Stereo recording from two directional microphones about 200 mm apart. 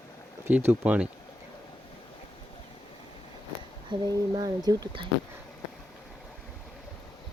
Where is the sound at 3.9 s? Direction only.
20° right (ahead or behind).